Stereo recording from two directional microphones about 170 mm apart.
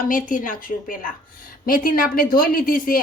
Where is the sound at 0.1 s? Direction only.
50° left (ahead or behind).